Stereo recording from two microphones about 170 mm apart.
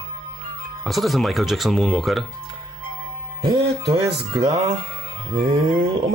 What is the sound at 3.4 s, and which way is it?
Music, 25° right (ahead or behind).